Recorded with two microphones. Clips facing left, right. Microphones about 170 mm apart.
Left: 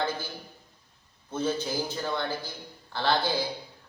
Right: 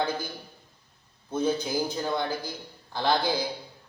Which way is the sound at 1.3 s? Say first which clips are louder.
Right 3 dB; 15° right (ahead or behind).